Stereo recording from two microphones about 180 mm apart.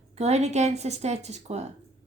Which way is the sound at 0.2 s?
35° right (ahead or behind).